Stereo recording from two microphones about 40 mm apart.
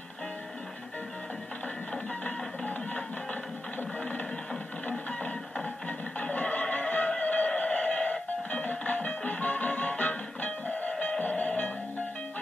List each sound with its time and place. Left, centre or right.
2.2 s music: left
4.0 s music: left